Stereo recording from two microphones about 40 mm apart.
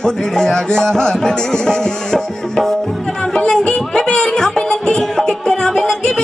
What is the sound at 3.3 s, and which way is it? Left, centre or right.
Music, centre.